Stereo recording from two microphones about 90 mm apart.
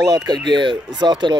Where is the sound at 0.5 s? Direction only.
60° right (ahead or behind).